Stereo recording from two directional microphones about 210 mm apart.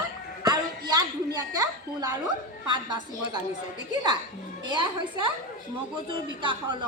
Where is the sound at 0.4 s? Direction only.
20° right (ahead or behind).